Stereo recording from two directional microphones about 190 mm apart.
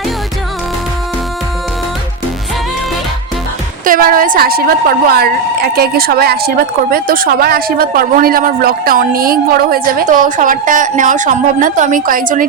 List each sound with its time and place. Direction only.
3.8 s speech: 50° right (ahead or behind)